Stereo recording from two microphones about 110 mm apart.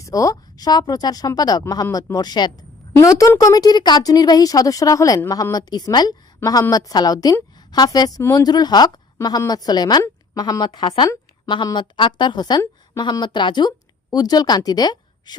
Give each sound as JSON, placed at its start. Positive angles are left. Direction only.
{"t": 0.0, "sound": "a woman's voice", "side_deg": 30}